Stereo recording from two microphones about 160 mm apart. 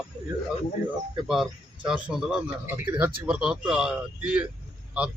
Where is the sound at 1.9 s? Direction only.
5° right (ahead or behind).